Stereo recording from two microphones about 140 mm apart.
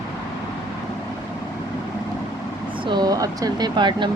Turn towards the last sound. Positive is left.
turn(degrees=-35)  # may be behind; listen again after turning